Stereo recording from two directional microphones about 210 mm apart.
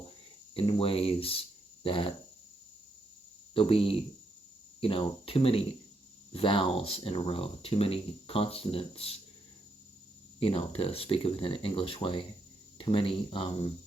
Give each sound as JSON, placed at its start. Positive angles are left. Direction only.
{"t": 0.5, "sound": "speech", "side_deg": 25}
{"t": 3.5, "sound": "speech", "side_deg": 25}
{"t": 10.4, "sound": "speech", "side_deg": 25}